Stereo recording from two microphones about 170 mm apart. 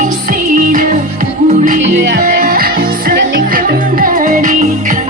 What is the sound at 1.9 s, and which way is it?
Music, 85° right.